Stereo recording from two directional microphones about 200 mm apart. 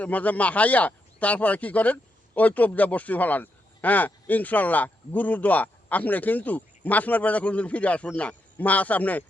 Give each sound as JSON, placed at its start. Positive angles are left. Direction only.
{"t": 0.0, "sound": "a man's voice", "side_deg": 5}